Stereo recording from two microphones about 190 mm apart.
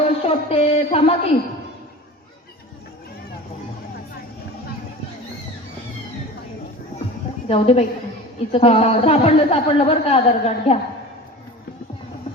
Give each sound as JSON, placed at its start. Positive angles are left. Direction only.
{"t": 0.3, "sound": "a woman's voice", "side_deg": 30}
{"t": 7.4, "sound": "a woman's voice", "side_deg": 35}